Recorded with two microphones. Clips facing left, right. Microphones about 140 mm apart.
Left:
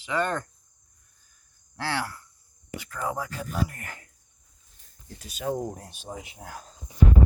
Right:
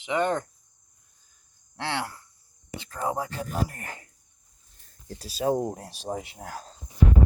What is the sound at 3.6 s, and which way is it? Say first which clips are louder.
Speech: left 1 dB; 35° right (ahead or behind).